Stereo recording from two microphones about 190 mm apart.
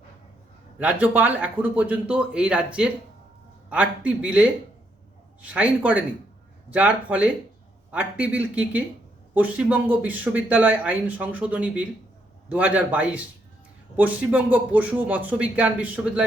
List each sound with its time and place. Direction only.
0.8 s speech: 10° right (ahead or behind)
3.7 s speech: 5° right (ahead or behind)